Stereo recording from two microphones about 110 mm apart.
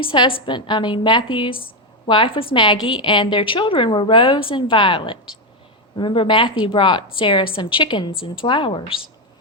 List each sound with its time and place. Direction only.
0.0 s a woman's voice: 55° left (ahead or behind)